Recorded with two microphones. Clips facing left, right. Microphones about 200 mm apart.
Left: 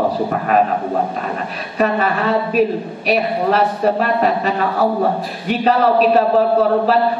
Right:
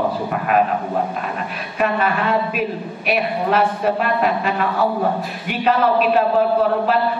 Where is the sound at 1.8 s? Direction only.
35° left (ahead or behind).